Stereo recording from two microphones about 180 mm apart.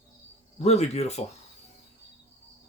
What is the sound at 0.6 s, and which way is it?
Speech, 35° left (ahead or behind).